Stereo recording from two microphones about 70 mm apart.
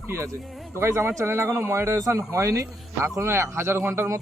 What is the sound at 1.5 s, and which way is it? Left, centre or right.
Speech, right.